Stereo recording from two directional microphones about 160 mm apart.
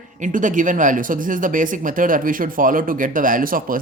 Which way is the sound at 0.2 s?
55° right (ahead or behind).